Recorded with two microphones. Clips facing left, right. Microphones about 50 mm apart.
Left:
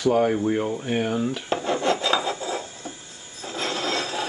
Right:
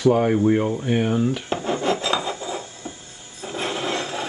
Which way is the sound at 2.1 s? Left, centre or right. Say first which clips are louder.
Even; centre.